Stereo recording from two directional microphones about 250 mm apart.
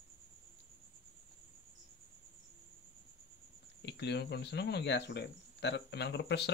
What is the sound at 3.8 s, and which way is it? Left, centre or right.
Speech, left.